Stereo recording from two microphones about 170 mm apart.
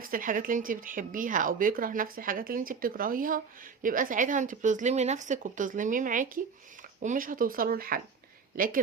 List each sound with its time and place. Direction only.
0.0 s speech: 55° right (ahead or behind)